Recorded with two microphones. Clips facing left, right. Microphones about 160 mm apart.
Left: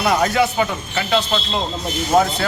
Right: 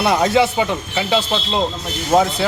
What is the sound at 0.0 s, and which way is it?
Speech, 25° right (ahead or behind).